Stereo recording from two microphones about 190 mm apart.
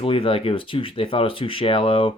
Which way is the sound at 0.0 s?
30° left (ahead or behind).